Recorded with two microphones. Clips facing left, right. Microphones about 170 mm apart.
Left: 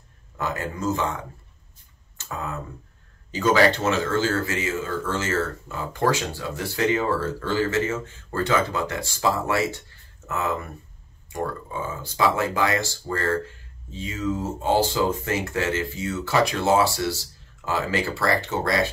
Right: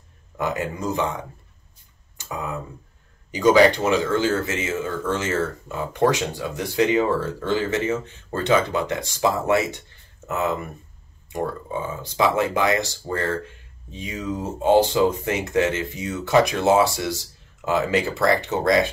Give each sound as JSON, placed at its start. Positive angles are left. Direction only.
{"t": 0.4, "sound": "speech", "side_deg": -15}